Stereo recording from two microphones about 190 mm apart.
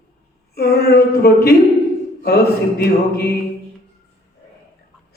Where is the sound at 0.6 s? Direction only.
55° left (ahead or behind).